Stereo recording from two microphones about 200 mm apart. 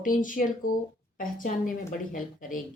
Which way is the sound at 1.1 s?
45° left (ahead or behind).